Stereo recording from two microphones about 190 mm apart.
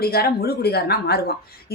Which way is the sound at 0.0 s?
55° left (ahead or behind).